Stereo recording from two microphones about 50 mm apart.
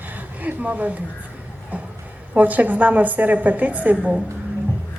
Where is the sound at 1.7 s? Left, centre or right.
Right.